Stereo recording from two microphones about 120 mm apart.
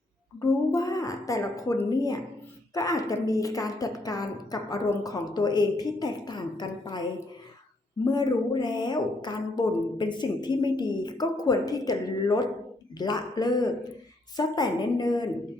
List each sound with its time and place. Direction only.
0.3 s a woman's voice: 30° left (ahead or behind)